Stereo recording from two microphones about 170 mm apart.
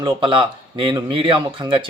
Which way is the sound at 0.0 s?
30° right (ahead or behind).